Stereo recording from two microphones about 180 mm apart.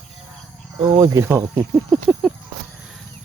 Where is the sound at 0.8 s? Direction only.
25° right (ahead or behind).